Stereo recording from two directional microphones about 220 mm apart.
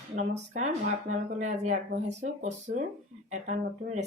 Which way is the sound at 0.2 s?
30° right (ahead or behind).